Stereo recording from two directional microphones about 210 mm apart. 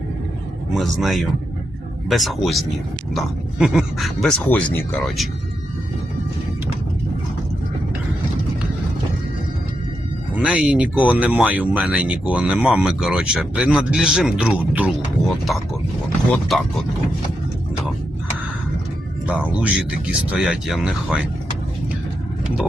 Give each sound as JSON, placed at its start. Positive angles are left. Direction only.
{"t": 0.7, "sound": "speech", "side_deg": 0}
{"t": 10.3, "sound": "speech", "side_deg": -5}
{"t": 16.3, "sound": "speech", "side_deg": 5}
{"t": 19.3, "sound": "speech", "side_deg": -5}